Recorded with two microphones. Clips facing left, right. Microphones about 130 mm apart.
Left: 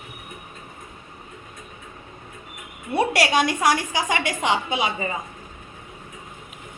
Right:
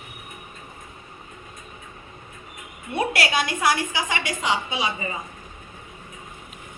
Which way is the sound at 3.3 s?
45° left (ahead or behind).